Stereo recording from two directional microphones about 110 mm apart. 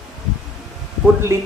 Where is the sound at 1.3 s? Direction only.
25° right (ahead or behind).